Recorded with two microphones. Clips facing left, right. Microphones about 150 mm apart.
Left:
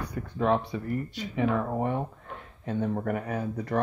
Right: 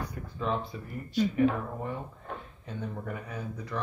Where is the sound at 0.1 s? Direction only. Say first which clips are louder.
Left 10 dB; 70° left (ahead or behind).